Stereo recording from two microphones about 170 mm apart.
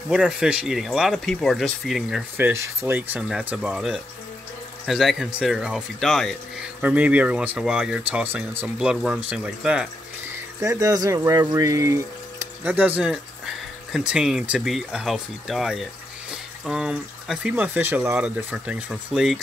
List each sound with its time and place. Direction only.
0.1 s speech: 5° right (ahead or behind)
2.3 s speech: 15° right (ahead or behind)
10.6 s speech: 20° right (ahead or behind); by 19.4 s centre (ahead or behind)